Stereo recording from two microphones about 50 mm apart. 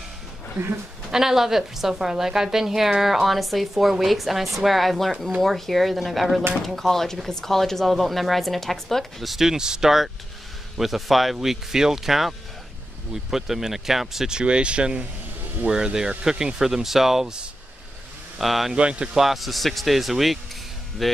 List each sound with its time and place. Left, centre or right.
1.1 s a woman's voice: centre
18.4 s speech: centre
18.8 s speech: right
19.1 s speech: centre